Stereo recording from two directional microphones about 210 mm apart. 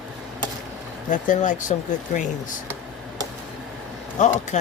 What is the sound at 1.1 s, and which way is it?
Speech, 40° left (ahead or behind).